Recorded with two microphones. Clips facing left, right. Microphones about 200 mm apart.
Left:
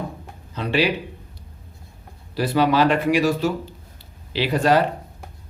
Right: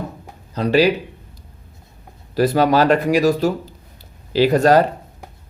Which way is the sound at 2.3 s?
45° right (ahead or behind).